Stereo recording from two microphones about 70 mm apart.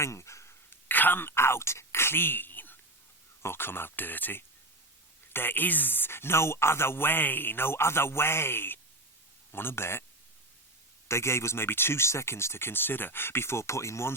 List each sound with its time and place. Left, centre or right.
0.0 s a sound: left
3.4 s speech: left
11.1 s speech: left